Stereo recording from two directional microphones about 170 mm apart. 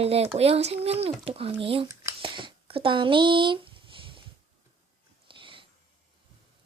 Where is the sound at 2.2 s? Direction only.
30° right (ahead or behind).